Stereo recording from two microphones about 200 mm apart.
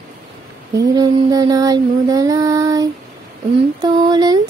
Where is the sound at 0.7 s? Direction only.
20° right (ahead or behind).